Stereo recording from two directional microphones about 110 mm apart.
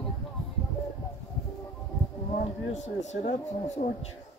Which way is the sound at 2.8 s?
90° left.